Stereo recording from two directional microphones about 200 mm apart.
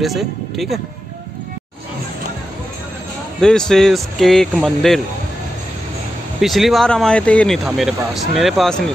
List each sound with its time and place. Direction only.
0.0 s speech: centre (ahead or behind)
3.3 s speech: 5° left (ahead or behind)
6.4 s speech: centre (ahead or behind)